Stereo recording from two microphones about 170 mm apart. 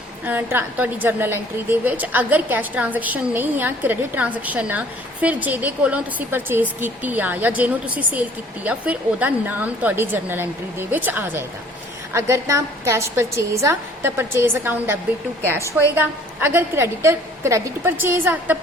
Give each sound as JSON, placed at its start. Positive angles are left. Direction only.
{"t": 0.3, "sound": "a woman's voice", "side_deg": -10}
{"t": 16.0, "sound": "a woman's voice", "side_deg": -10}